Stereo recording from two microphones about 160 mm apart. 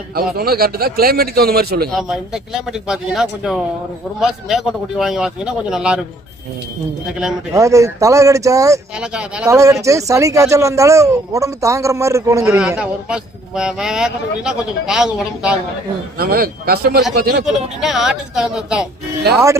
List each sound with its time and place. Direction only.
0.3 s a man's voice: 70° right (ahead or behind)
1.9 s a man's voice: centre (ahead or behind)
7.5 s speech: 20° right (ahead or behind)
9.0 s a man's voice: 5° right (ahead or behind)
9.5 s speech: 20° right (ahead or behind)
12.5 s a man's voice: 5° right (ahead or behind)
16.1 s a man's voice: 75° right (ahead or behind)
17.4 s a man's voice: centre (ahead or behind)